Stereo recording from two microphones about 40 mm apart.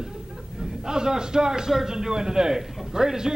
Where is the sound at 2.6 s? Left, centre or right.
Centre.